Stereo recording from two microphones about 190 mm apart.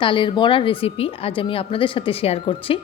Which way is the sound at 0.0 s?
25° left (ahead or behind).